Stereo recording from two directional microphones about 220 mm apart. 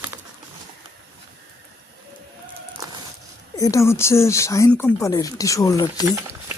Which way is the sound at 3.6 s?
15° left (ahead or behind).